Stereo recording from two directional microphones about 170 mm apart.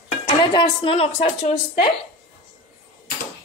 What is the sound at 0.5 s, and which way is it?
Speech, 30° left (ahead or behind).